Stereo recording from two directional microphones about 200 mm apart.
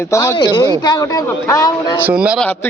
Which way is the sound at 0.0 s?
15° left (ahead or behind).